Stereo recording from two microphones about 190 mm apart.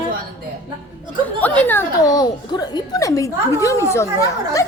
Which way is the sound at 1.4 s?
10° left (ahead or behind).